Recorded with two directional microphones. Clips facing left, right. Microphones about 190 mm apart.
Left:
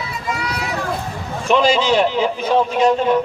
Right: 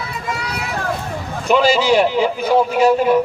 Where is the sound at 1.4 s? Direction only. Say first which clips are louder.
Right 1 dB; 5° right (ahead or behind).